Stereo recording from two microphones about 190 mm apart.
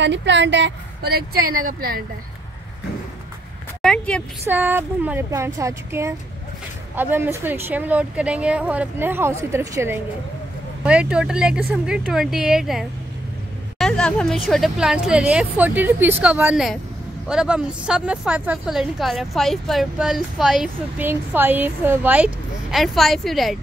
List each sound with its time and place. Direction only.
0.0 s a woman's voice: 70° right (ahead or behind); by 2.0 s 50° right (ahead or behind)
3.8 s speech: 5° left (ahead or behind)
4.5 s a woman's voice: 10° right (ahead or behind)